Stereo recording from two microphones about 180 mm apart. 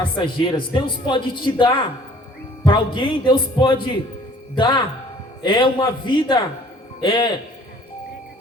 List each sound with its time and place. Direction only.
0.0 s a man's voice: 25° left (ahead or behind)